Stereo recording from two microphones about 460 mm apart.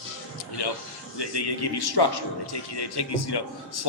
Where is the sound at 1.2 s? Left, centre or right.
Left.